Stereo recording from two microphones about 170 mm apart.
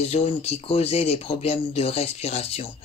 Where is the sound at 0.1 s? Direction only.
35° left (ahead or behind).